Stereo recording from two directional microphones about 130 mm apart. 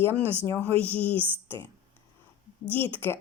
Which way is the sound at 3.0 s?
15° left (ahead or behind).